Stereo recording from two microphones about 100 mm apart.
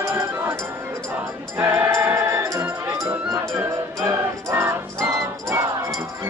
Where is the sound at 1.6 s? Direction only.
20° right (ahead or behind).